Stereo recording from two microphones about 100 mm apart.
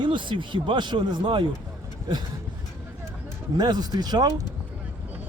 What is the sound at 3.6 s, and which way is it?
Speech, 45° right (ahead or behind).